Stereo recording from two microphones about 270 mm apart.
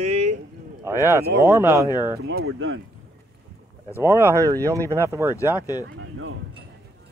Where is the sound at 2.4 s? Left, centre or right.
Right.